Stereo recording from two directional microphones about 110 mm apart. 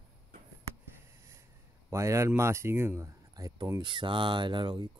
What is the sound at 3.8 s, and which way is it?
Speech, 45° right (ahead or behind).